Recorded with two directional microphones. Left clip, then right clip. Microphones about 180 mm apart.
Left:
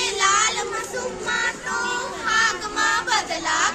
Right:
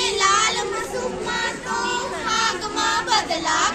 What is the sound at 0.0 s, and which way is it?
Child singing, centre (ahead or behind).